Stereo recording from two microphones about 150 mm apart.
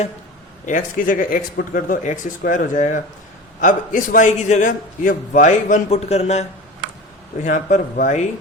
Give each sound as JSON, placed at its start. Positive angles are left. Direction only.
{"t": 0.6, "sound": "a man's voice", "side_deg": 60}
{"t": 7.4, "sound": "a man's voice", "side_deg": 60}